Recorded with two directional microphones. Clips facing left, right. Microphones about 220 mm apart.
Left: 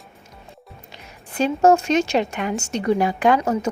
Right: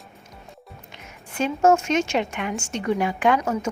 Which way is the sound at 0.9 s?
35° left (ahead or behind).